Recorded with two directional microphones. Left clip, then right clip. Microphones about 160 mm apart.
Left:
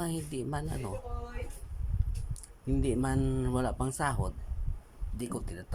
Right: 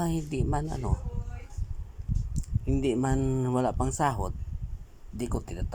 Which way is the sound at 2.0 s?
10° right (ahead or behind).